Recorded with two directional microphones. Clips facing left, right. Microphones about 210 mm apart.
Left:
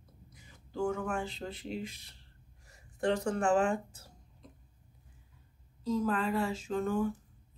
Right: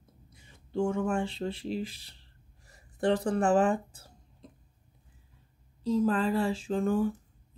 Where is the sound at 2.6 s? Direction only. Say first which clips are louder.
Right 3 dB; 35° right (ahead or behind).